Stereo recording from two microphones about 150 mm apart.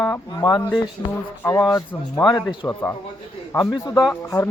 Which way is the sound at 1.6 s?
Centre (ahead or behind).